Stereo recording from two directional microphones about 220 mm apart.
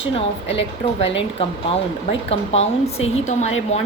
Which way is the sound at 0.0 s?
55° left (ahead or behind).